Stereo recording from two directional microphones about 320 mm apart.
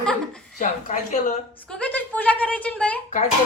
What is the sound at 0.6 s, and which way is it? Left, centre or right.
A woman's voice, left.